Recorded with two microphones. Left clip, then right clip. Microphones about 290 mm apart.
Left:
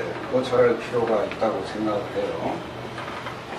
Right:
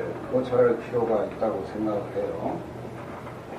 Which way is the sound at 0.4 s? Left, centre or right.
Centre.